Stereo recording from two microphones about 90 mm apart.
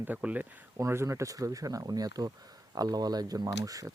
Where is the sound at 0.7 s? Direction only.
30° right (ahead or behind).